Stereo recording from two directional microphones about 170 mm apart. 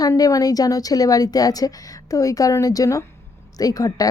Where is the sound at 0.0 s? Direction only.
20° left (ahead or behind).